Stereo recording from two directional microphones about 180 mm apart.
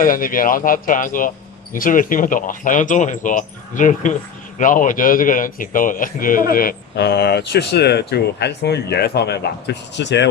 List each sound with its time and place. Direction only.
0.0 s speech: 50° left (ahead or behind); by 10.2 s 75° left (ahead or behind)